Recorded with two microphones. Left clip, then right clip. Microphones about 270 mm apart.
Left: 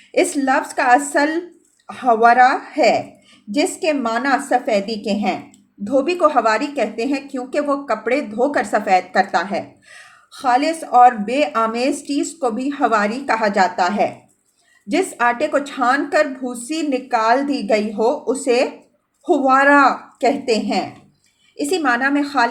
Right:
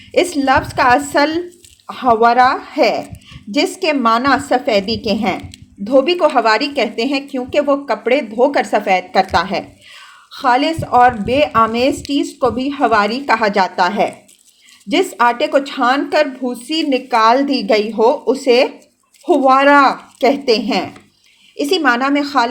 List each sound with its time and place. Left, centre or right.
0.1 s a woman's voice: right